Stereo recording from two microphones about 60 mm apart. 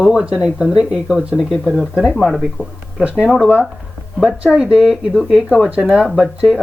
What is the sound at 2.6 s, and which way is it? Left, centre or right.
Speech, left.